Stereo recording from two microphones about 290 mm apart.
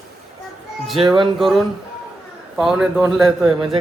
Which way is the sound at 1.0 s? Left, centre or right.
Centre.